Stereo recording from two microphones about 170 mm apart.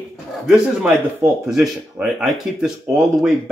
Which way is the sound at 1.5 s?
5° right (ahead or behind).